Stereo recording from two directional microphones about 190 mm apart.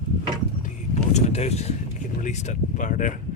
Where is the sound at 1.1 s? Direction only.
35° left (ahead or behind).